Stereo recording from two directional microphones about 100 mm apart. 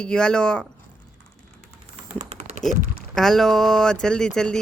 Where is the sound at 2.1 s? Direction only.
90° right.